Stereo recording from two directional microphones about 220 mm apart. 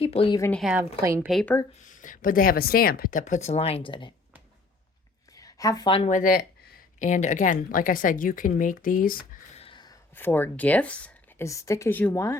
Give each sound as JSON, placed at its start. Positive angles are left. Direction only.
{"t": 0.0, "sound": "speech", "side_deg": 25}
{"t": 0.5, "sound": "a woman's voice", "side_deg": -5}
{"t": 1.3, "sound": "speech", "side_deg": 0}
{"t": 1.8, "sound": "speech", "side_deg": 35}
{"t": 5.3, "sound": "speech", "side_deg": 15}
{"t": 9.6, "sound": "a sound", "side_deg": 20}
{"t": 10.2, "sound": "speech", "side_deg": 10}